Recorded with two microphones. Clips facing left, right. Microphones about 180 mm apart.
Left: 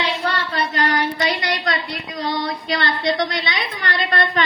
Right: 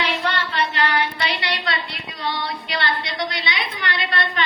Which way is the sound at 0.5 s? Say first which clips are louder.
Left 1 dB; 40° left (ahead or behind).